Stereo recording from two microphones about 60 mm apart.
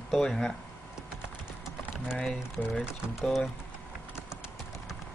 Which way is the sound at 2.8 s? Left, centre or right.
Centre.